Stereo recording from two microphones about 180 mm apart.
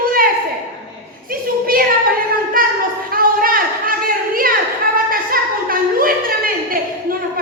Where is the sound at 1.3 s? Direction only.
55° right (ahead or behind).